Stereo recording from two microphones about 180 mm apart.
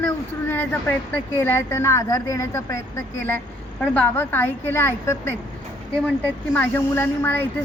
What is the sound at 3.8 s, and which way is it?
Speech, 10° left (ahead or behind).